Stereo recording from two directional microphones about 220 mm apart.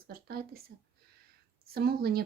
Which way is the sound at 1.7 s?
45° right (ahead or behind).